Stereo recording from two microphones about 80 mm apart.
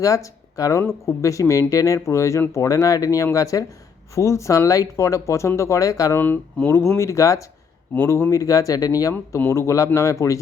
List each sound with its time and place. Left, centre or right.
0.0 s speech: left
6.1 s speech: left
9.5 s speech: left